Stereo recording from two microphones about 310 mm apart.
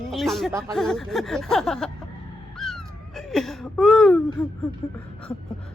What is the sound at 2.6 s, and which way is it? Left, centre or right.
Cat, centre.